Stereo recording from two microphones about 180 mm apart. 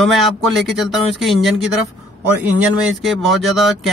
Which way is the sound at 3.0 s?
Centre (ahead or behind).